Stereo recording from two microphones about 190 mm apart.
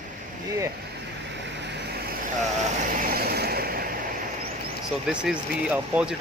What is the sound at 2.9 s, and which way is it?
Vehicle, 50° right (ahead or behind).